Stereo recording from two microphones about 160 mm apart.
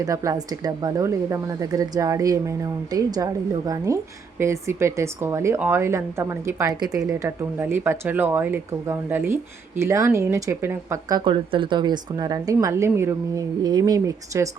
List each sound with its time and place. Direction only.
0.0 s a woman's voice: 20° right (ahead or behind)
11.2 s a woman's voice: 30° right (ahead or behind)